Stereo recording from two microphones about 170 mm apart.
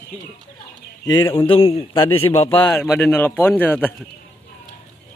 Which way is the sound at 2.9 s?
10° left (ahead or behind).